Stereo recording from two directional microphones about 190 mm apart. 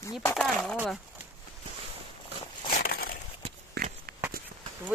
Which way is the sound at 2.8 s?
55° left (ahead or behind).